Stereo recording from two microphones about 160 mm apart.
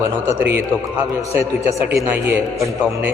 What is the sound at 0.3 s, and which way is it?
Speech, 15° right (ahead or behind).